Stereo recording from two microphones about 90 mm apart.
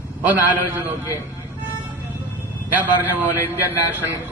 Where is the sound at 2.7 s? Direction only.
20° right (ahead or behind).